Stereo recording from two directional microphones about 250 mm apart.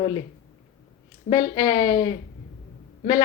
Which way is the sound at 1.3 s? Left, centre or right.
Centre.